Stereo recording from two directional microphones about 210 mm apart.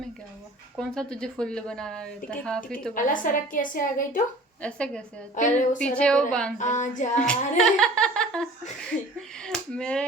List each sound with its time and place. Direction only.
0.8 s speech: 5° left (ahead or behind)
2.9 s a woman's voice: 40° left (ahead or behind)
4.6 s speech: 5° left (ahead or behind)
5.3 s a woman's voice: 35° left (ahead or behind)
5.8 s speech: 5° left (ahead or behind)
6.6 s a woman's voice: 35° left (ahead or behind)
7.2 s speech: 5° left (ahead or behind)